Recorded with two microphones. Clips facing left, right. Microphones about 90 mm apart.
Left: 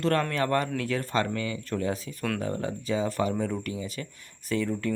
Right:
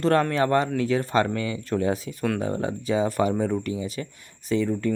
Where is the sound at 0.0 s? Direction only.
30° right (ahead or behind).